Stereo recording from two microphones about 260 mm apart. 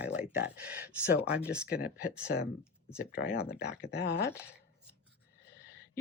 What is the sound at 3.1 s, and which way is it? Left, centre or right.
Speech, left.